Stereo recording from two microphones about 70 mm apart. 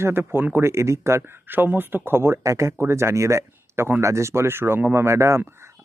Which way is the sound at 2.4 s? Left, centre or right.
Right.